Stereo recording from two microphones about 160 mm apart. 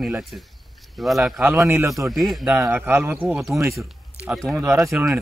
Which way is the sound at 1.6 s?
15° right (ahead or behind).